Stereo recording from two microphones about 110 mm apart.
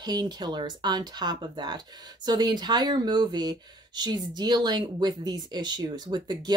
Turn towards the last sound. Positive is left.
turn(degrees=-40)  # may be behind; listen again after turning